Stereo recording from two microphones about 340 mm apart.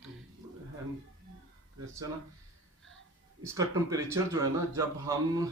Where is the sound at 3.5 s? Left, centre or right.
Centre.